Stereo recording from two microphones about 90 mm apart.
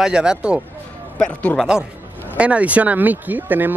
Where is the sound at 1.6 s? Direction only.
5° right (ahead or behind).